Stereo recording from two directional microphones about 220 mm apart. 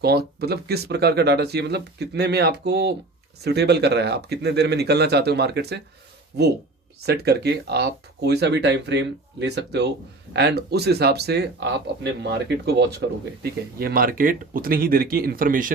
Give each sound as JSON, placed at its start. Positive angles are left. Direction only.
{"t": 0.0, "sound": "speech", "side_deg": -45}